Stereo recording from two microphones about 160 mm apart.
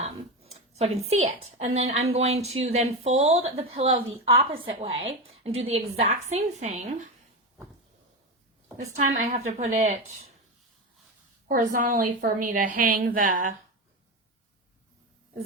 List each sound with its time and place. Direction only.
0.0 s a woman's voice: 40° right (ahead or behind)
8.8 s speech: 45° right (ahead or behind)
11.4 s a woman's voice: 55° right (ahead or behind)